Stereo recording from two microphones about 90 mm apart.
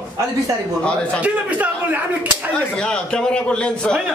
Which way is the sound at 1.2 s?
15° right (ahead or behind).